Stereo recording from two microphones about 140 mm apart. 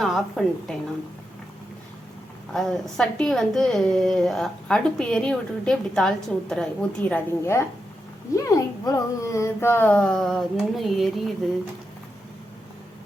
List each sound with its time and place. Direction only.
0.0 s a woman's voice: centre (ahead or behind)
2.5 s a woman's voice: centre (ahead or behind)
7.4 s speech: 20° left (ahead or behind); by 11.3 s centre (ahead or behind)